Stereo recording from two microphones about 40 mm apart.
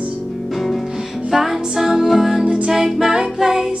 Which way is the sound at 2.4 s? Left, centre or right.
Right.